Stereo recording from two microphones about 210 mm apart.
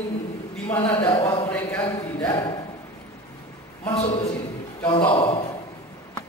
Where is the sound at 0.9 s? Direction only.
15° left (ahead or behind).